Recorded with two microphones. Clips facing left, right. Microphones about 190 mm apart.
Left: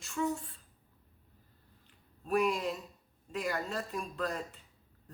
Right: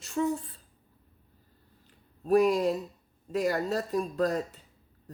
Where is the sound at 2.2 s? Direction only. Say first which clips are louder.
Right 8 dB; 40° right (ahead or behind).